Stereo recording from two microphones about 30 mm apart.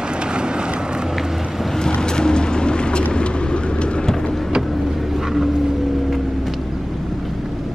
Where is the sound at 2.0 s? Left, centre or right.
Left.